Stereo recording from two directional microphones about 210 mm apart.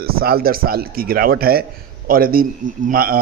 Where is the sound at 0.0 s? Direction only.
45° right (ahead or behind).